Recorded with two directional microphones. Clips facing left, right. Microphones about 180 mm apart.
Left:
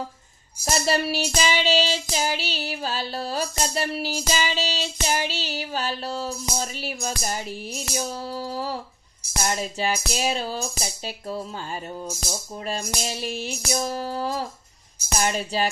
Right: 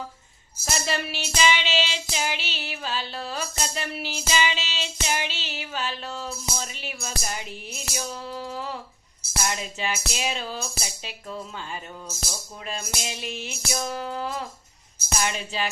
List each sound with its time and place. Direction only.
0.6 s music: 40° left (ahead or behind)
13.0 s music: 40° left (ahead or behind)